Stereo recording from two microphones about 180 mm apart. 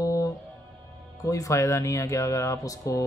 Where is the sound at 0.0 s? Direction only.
15° left (ahead or behind).